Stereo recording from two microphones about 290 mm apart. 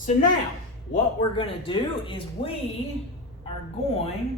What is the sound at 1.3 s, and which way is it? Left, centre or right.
Speech, centre.